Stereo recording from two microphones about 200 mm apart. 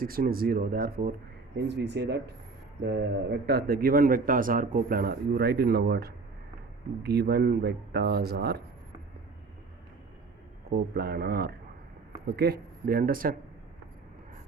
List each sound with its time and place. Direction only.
0.0 s a man's voice: 45° right (ahead or behind)
1.5 s a man's voice: 60° right (ahead or behind)
10.7 s a man's voice: 50° right (ahead or behind)